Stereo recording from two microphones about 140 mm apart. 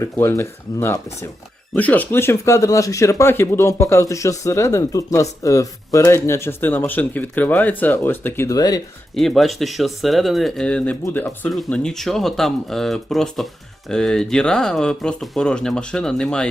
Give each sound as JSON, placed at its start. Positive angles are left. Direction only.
{"t": 0.0, "sound": "speech", "side_deg": 20}
{"t": 9.1, "sound": "speech", "side_deg": 0}